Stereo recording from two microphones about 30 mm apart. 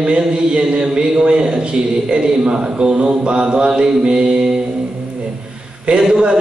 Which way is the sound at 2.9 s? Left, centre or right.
Right.